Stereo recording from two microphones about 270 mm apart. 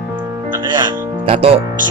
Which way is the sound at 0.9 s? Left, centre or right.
Right.